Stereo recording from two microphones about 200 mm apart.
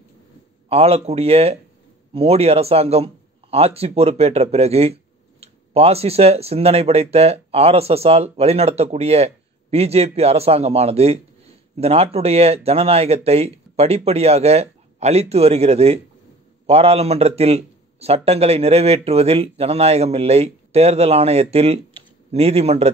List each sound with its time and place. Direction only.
0.7 s speech: 30° right (ahead or behind)